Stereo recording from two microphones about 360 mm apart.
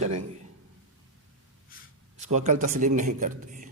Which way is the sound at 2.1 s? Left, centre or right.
Centre.